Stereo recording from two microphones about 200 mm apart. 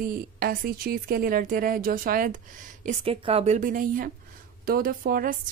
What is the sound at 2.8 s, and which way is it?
A woman's voice, 30° right (ahead or behind).